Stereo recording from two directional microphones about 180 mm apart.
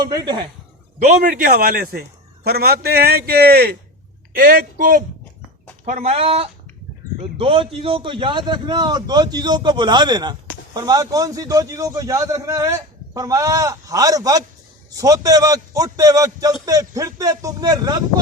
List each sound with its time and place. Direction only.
0.0 s a man's voice: 25° right (ahead or behind)
1.0 s a man's voice: 45° right (ahead or behind)
5.8 s a man's voice: 40° right (ahead or behind); by 18.0 s 20° right (ahead or behind)